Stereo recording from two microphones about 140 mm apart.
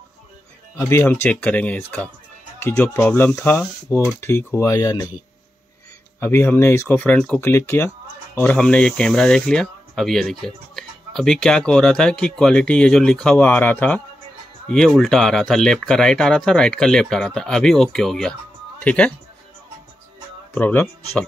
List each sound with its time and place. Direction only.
0.7 s speech: 15° left (ahead or behind)
6.1 s speech: 20° left (ahead or behind)
7.4 s speech: 20° left (ahead or behind)
20.5 s speech: 15° left (ahead or behind)